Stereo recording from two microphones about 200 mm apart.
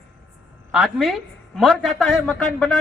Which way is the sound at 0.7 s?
Centre (ahead or behind).